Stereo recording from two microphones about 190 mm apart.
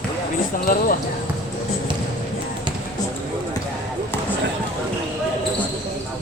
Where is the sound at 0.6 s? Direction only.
50° left (ahead or behind).